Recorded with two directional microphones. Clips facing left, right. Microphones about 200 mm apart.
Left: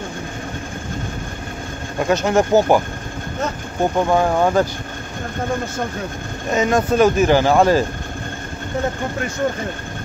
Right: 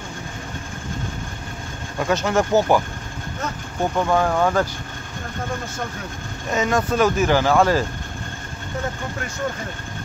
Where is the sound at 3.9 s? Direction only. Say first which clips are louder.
Left 2 dB; 20° left (ahead or behind).